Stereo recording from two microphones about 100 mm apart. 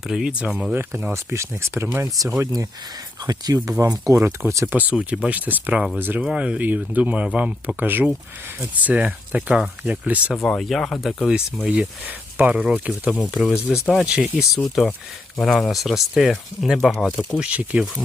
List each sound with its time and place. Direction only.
0.1 s speech: 5° right (ahead or behind)
0.7 s speech: 20° right (ahead or behind)
10.3 s speech: 5° left (ahead or behind)
11.6 s speech: 10° right (ahead or behind)
14.6 s speech: 5° left (ahead or behind)
17.4 s speech: 15° right (ahead or behind)